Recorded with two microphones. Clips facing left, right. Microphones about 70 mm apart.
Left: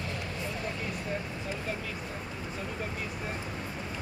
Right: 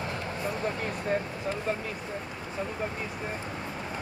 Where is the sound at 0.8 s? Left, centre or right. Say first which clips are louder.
Right 5 dB; right.